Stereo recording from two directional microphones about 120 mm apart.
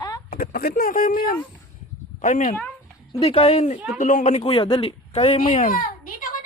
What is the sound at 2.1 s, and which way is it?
Speech, 90° left.